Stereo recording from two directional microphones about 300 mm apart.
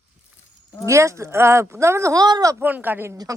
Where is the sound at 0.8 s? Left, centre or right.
Centre.